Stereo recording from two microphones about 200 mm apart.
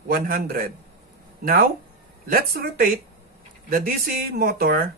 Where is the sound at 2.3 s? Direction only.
45° right (ahead or behind).